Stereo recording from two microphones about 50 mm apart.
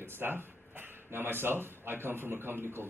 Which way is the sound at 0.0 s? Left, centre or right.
Right.